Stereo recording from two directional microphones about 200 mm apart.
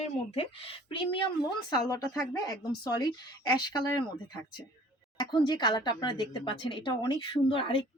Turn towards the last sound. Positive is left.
turn(degrees=25)  # may be behind; listen again after turning